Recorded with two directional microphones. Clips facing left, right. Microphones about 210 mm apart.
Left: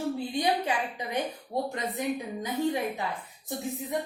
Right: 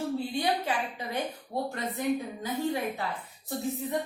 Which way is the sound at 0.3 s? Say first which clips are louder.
Left 3 dB; 15° left (ahead or behind).